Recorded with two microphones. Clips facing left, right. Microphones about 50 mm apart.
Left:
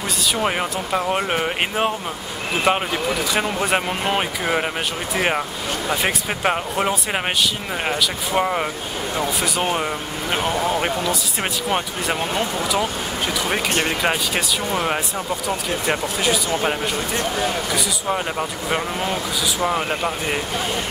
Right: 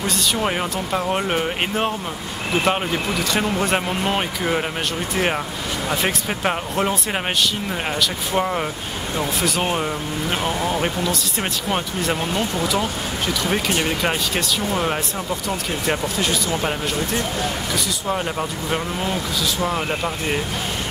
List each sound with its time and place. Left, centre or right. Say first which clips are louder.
0.4 s speech: left 1 dB; centre
13.8 s speech: left 1 dB; centre